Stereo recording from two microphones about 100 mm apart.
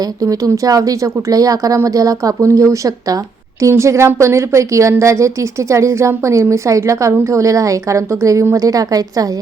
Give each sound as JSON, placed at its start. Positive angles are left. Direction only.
{"t": 0.0, "sound": "speech", "side_deg": -35}